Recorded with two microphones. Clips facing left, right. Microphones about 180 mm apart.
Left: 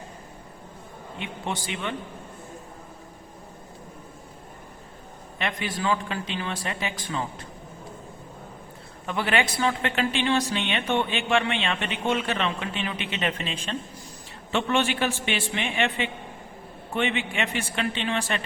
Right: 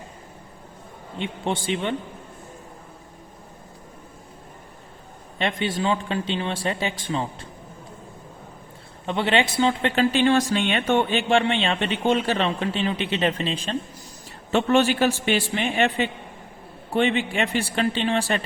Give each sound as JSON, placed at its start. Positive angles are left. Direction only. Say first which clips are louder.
{"t": 1.2, "sound": "speech", "louder": "right 6 dB", "side_deg": -30}
{"t": 5.4, "sound": "speech", "louder": "right 5 dB", "side_deg": -25}
{"t": 9.0, "sound": "speech", "louder": "right 4 dB", "side_deg": -25}